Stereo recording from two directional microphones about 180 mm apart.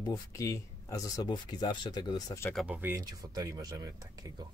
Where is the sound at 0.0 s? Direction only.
20° left (ahead or behind).